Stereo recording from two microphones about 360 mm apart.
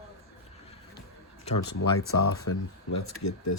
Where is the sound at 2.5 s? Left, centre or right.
Left.